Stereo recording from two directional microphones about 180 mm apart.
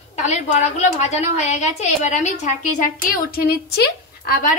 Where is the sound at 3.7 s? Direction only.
60° left (ahead or behind).